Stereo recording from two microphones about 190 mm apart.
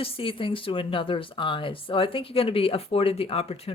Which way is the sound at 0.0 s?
30° left (ahead or behind).